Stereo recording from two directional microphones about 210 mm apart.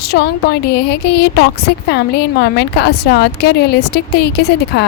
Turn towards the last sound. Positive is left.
turn(degrees=50)  # may be behind; listen again after turning